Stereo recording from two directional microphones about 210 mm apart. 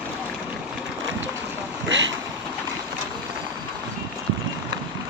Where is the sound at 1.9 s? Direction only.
60° right (ahead or behind).